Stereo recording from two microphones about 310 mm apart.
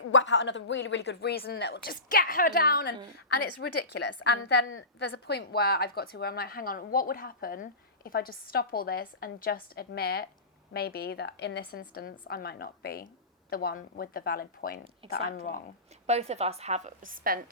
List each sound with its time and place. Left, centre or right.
0.1 s a woman's voice: left
16.0 s speech: right